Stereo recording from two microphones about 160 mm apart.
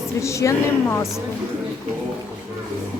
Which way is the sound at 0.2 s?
20° left (ahead or behind).